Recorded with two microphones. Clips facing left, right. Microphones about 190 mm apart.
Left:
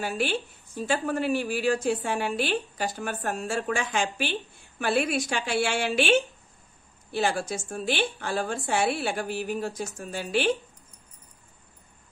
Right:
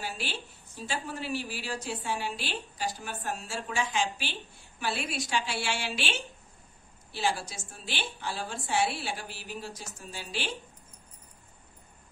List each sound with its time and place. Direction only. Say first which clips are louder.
0.0 s a woman's voice: left 9 dB; 55° left (ahead or behind)